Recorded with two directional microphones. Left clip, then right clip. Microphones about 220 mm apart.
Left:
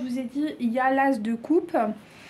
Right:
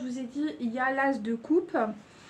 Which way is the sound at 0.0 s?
45° left (ahead or behind).